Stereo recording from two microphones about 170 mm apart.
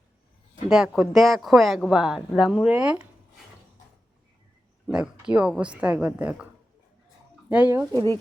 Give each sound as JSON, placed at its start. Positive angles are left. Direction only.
{"t": 0.7, "sound": "speech", "side_deg": 0}
{"t": 4.9, "sound": "a woman's voice", "side_deg": -5}
{"t": 7.5, "sound": "a woman's voice", "side_deg": -10}